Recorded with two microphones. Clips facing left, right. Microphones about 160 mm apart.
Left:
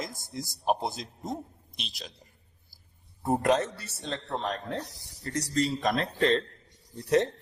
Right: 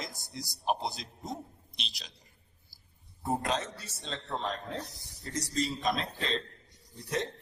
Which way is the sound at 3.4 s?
65° left (ahead or behind).